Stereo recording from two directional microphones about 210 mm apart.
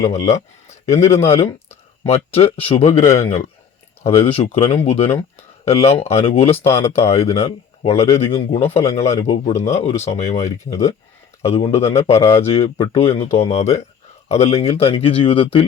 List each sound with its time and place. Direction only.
0.9 s a man's voice: 30° left (ahead or behind)